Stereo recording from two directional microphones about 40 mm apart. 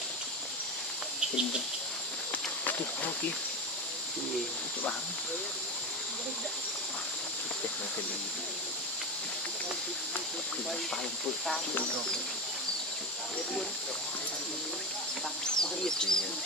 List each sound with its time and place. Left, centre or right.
15.4 s speech: centre